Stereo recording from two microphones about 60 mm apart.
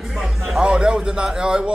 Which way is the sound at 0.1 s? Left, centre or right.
Centre.